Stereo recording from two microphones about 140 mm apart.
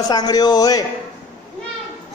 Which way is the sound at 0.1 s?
30° left (ahead or behind).